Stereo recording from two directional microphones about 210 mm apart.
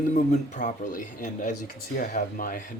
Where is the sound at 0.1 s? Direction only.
35° left (ahead or behind).